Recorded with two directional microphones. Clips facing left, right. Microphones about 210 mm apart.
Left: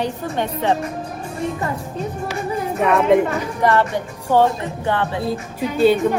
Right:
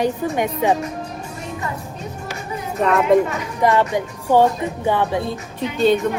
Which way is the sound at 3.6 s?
15° right (ahead or behind).